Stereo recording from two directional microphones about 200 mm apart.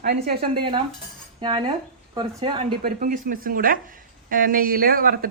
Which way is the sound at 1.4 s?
25° right (ahead or behind).